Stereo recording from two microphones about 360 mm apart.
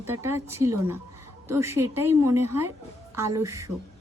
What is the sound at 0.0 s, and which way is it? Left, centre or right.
Speech, centre.